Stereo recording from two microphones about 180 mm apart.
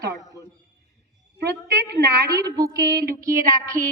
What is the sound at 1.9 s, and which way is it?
Speech, 70° right (ahead or behind).